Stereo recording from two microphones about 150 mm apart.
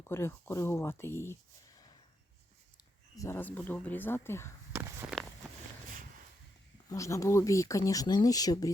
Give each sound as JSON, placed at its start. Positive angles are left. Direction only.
{"t": 0.1, "sound": "speech", "side_deg": 15}
{"t": 3.2, "sound": "speech", "side_deg": 15}
{"t": 4.7, "sound": "walk", "side_deg": -15}
{"t": 6.8, "sound": "speech", "side_deg": 20}